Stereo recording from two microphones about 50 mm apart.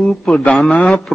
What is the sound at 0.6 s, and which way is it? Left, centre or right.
Speech, centre.